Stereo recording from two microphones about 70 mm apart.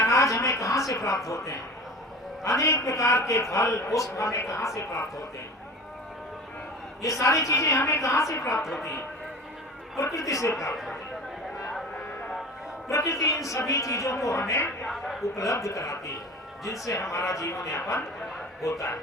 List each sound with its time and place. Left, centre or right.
0.0 s a sound: left
2.4 s a man's voice: left
7.0 s a man's voice: left
10.0 s a man's voice: left
12.9 s a man's voice: left
14.8 s a woman's voice: centre
15.4 s a man's voice: left